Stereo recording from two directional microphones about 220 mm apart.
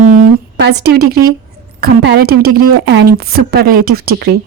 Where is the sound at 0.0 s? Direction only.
35° right (ahead or behind).